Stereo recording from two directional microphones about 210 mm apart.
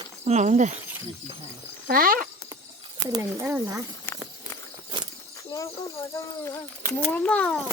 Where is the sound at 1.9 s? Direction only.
45° right (ahead or behind).